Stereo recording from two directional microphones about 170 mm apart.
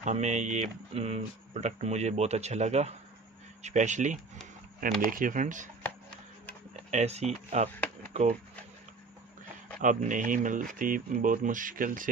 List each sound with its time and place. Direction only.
0.0 s speech: 45° right (ahead or behind)
6.9 s speech: 40° right (ahead or behind)
9.8 s speech: 50° right (ahead or behind)